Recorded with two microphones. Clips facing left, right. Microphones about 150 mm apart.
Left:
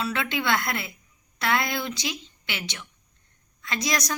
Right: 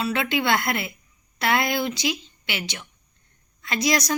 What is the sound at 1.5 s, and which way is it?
Speech, 5° right (ahead or behind).